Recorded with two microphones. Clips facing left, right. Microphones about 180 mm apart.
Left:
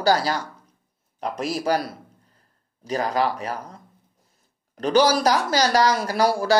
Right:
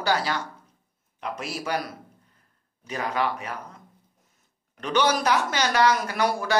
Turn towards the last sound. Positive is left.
turn(degrees=35)  # may be behind; listen again after turning